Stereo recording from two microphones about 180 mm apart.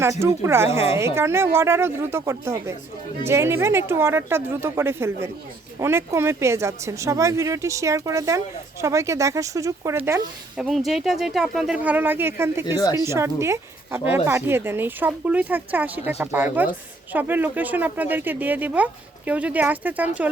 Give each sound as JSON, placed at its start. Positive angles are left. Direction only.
{"t": 0.0, "sound": "speech", "side_deg": -15}
{"t": 10.6, "sound": "speech", "side_deg": 0}